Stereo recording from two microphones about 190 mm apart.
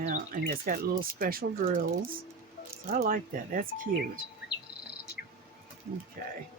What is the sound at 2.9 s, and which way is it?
Speech, 45° right (ahead or behind).